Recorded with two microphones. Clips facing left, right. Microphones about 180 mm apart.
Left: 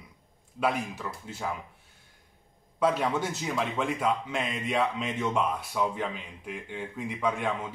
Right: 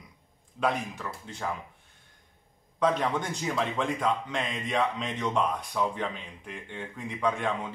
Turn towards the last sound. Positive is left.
turn(degrees=5)  # may be behind; listen again after turning